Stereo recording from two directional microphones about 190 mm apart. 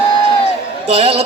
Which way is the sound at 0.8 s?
30° right (ahead or behind).